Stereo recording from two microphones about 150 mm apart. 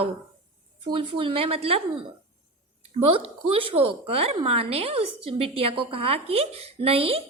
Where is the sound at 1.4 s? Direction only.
40° right (ahead or behind).